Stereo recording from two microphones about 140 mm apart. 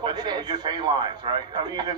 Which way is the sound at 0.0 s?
30° right (ahead or behind).